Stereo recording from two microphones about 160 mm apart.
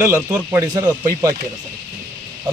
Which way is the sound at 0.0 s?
15° right (ahead or behind).